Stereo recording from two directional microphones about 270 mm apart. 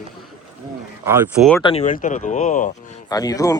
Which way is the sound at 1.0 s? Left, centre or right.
Centre.